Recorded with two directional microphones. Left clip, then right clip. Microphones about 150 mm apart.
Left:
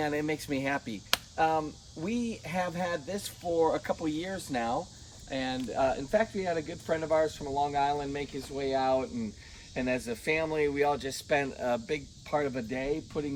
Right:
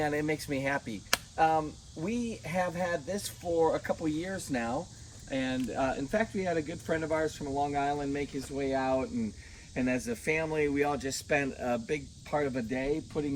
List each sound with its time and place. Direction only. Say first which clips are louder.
0.0 s speech: even; 25° left (ahead or behind); by 4.7 s 60° left (ahead or behind)
5.3 s speech: even; 90° left; by 13.3 s 30° left (ahead or behind)